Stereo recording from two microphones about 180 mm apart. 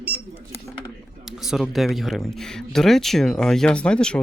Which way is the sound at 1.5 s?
Centre (ahead or behind).